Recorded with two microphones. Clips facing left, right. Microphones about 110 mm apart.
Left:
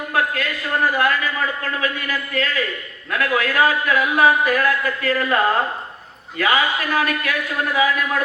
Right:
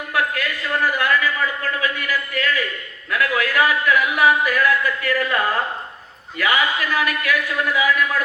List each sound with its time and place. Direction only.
0.1 s a sound: 30° left (ahead or behind)
0.9 s a man's voice: 35° left (ahead or behind)
6.4 s a man's voice: 30° left (ahead or behind)